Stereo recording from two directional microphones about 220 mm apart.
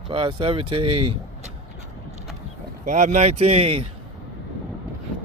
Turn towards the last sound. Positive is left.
turn(degrees=-25)  # may be behind; listen again after turning